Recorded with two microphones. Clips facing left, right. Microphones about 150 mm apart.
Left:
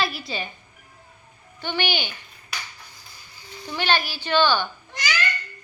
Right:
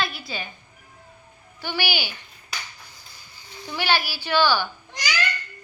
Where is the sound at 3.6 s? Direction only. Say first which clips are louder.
Even; 10° right (ahead or behind).